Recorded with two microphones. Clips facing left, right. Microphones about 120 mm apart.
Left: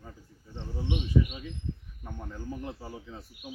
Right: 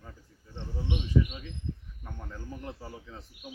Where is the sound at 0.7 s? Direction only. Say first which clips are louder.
Left 1 dB; 20° left (ahead or behind).